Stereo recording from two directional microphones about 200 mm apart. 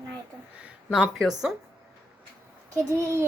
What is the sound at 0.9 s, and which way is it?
Speech, 5° right (ahead or behind).